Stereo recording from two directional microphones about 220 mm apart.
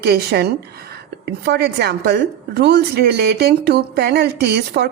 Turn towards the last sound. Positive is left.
turn(degrees=-50)  # may be behind; listen again after turning